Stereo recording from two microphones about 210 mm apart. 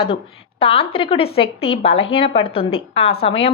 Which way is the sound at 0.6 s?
25° left (ahead or behind).